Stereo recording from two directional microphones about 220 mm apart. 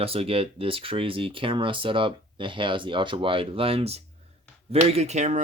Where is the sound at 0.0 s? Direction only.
25° right (ahead or behind).